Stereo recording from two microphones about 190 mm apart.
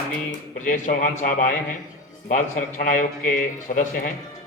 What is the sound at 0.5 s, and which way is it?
A man's voice, 45° left (ahead or behind).